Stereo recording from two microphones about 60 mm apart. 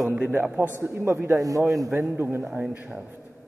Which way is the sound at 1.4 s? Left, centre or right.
Right.